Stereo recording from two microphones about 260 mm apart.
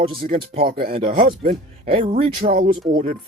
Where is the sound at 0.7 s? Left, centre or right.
Right.